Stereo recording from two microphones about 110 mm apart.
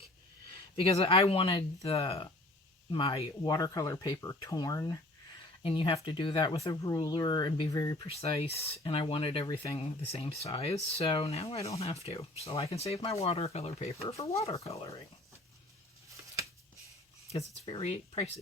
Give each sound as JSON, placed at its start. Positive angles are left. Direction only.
{"t": 0.8, "sound": "speech", "side_deg": 55}
{"t": 5.6, "sound": "speech", "side_deg": 55}
{"t": 6.7, "sound": "speech", "side_deg": 35}
{"t": 8.2, "sound": "speech", "side_deg": 65}
{"t": 10.1, "sound": "speech", "side_deg": 60}